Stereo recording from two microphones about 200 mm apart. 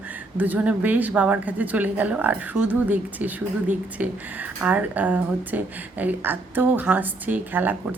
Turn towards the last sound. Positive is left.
turn(degrees=-10)  # may be behind; listen again after turning